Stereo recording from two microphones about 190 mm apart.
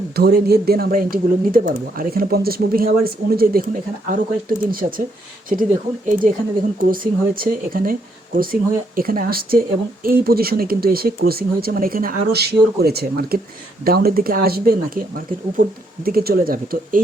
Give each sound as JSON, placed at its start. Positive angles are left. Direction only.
{"t": 0.2, "sound": "speech", "side_deg": -55}
{"t": 9.0, "sound": "speech", "side_deg": -50}
{"t": 16.0, "sound": "speech", "side_deg": -50}